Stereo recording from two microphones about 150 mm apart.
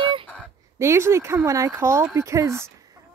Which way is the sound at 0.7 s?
20° right (ahead or behind).